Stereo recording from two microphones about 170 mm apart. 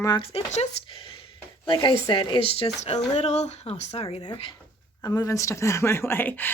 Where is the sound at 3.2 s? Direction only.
40° left (ahead or behind).